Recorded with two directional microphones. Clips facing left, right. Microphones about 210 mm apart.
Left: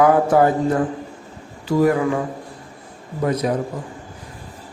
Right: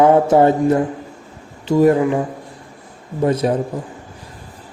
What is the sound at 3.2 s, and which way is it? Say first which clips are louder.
Speech: right 4 dB; 30° right (ahead or behind).